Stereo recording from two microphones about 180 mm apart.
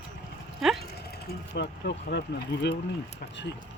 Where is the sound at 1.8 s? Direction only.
70° left (ahead or behind).